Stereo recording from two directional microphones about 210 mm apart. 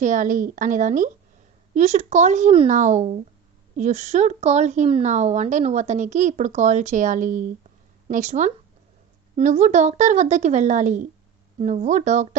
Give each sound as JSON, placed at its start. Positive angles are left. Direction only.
{"t": 0.0, "sound": "a woman's voice", "side_deg": -35}